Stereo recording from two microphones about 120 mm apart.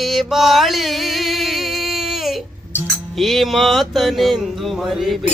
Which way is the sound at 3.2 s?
Centre (ahead or behind).